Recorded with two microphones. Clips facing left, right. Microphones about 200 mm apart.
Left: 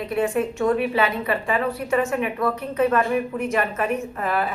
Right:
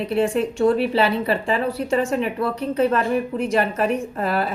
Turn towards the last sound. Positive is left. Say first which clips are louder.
# right 2 dB
turn(degrees=-35)  # may be behind; listen again after turning